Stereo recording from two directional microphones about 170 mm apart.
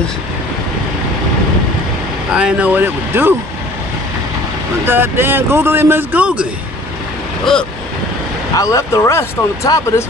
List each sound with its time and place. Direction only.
2.3 s speech: 5° right (ahead or behind)
4.8 s speech: 10° right (ahead or behind)
8.5 s speech: 20° left (ahead or behind)